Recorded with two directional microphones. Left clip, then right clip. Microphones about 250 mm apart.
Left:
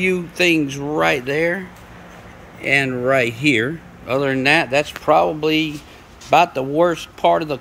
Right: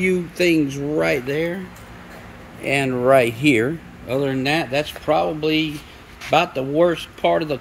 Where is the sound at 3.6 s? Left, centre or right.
Centre.